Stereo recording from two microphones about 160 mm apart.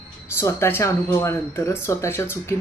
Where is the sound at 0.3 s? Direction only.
15° left (ahead or behind).